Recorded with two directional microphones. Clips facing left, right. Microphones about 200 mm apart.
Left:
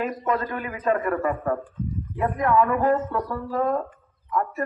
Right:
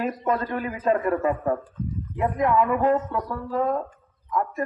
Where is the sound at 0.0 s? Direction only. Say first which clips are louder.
Even; 35° right (ahead or behind).